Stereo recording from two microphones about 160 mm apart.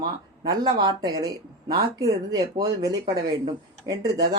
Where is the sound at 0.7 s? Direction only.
30° right (ahead or behind).